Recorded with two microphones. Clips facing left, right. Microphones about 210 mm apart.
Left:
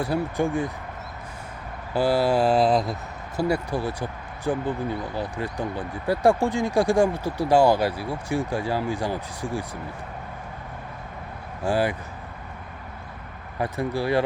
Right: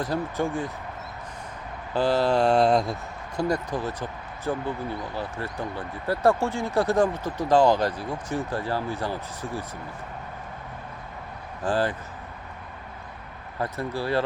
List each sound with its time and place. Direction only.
0.0 s speech: 10° left (ahead or behind)
1.9 s speech: 10° left (ahead or behind)
11.6 s speech: 10° left (ahead or behind)
13.6 s speech: 15° left (ahead or behind)